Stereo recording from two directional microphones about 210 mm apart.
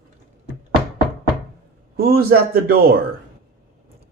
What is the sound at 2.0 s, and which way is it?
Speech, 45° right (ahead or behind).